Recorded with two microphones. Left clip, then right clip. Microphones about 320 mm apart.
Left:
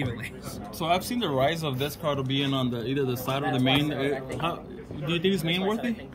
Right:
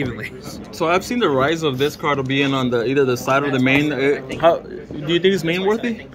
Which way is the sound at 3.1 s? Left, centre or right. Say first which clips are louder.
Right 11 dB; left.